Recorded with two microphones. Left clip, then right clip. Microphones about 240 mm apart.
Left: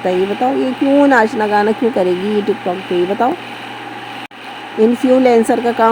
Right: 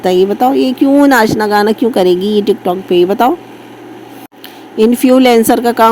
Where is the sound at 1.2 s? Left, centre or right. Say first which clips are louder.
Right 3 dB; right.